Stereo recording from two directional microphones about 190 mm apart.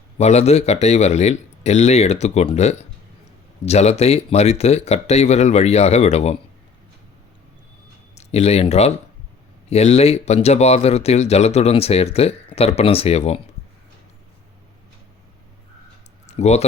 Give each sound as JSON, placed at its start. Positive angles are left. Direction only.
{"t": 0.2, "sound": "speech", "side_deg": 35}
{"t": 8.1, "sound": "speech", "side_deg": 35}
{"t": 16.2, "sound": "a sound", "side_deg": 35}